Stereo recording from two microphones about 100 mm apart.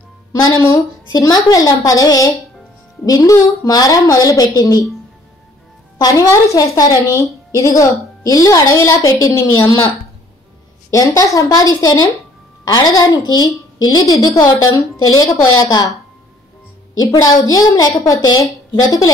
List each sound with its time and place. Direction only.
0.6 s a woman's voice: 35° left (ahead or behind)
5.9 s a woman's voice: 35° left (ahead or behind)
10.9 s a woman's voice: 30° left (ahead or behind)
17.0 s a woman's voice: 40° left (ahead or behind)